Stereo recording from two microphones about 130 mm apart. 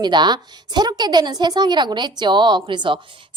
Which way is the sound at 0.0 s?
35° right (ahead or behind).